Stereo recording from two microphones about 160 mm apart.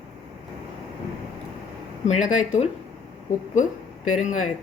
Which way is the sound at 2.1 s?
50° left (ahead or behind).